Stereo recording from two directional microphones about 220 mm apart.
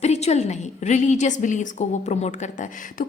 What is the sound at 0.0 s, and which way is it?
A woman's voice, 30° left (ahead or behind).